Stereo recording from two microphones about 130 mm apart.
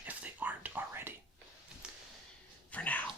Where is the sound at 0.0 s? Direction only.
10° right (ahead or behind).